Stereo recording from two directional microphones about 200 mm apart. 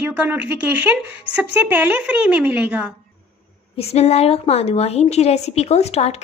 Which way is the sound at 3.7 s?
30° left (ahead or behind).